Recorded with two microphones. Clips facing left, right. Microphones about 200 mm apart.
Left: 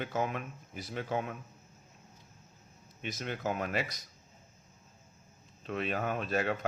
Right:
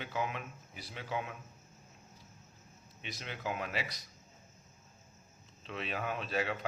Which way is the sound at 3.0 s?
45° left (ahead or behind).